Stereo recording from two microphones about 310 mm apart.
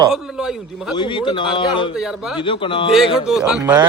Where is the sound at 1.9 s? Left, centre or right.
Centre.